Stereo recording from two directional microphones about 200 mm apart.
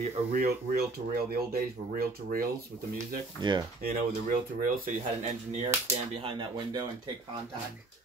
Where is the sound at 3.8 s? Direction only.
45° right (ahead or behind).